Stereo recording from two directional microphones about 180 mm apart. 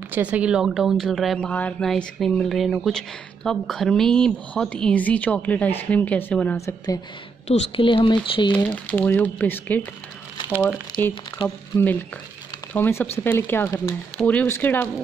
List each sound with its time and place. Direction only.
0.1 s speech: 5° right (ahead or behind); by 7.0 s 15° left (ahead or behind)
7.4 s speech: 35° left (ahead or behind)
8.6 s speech: 10° left (ahead or behind)
11.4 s speech: 10° left (ahead or behind)